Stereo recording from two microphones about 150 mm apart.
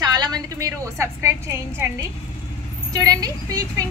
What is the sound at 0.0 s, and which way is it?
A woman's voice, 25° right (ahead or behind).